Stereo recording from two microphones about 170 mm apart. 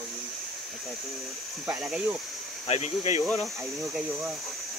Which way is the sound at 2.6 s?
40° left (ahead or behind).